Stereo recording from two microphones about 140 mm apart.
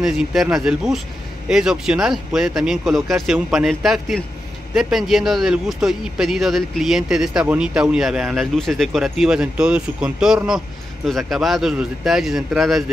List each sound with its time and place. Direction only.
0.0 s a man's voice: centre (ahead or behind)